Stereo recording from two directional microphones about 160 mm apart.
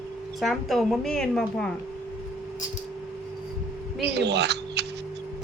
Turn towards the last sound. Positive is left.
turn(degrees=-90)